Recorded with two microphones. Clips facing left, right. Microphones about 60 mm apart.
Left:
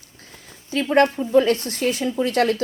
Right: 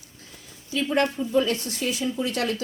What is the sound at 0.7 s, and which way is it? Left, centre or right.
Speech, left.